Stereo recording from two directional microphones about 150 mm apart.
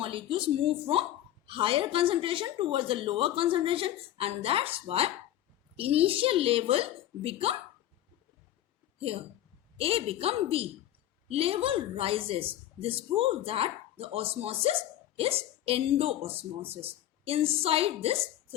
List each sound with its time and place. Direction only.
0.0 s a woman's voice: 35° right (ahead or behind)
9.7 s a woman's voice: 40° right (ahead or behind)